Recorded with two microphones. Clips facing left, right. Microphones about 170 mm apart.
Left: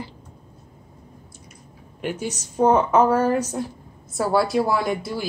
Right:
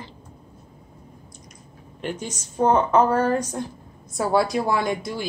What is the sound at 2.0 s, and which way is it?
A woman's voice, 10° left (ahead or behind).